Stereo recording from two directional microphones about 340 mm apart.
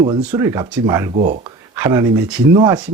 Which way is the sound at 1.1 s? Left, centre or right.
Right.